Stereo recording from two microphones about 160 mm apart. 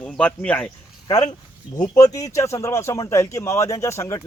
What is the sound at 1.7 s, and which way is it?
A man's voice, 20° left (ahead or behind).